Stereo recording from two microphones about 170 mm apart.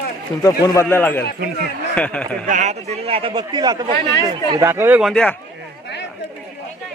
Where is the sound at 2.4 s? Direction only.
45° right (ahead or behind); by 5.3 s centre (ahead or behind).